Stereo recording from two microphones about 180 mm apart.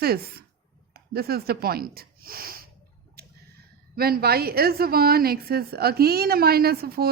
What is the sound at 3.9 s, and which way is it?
Speech, 55° right (ahead or behind).